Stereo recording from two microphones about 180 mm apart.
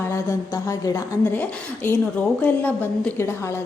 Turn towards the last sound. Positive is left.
turn(degrees=10)  # may be behind; listen again after turning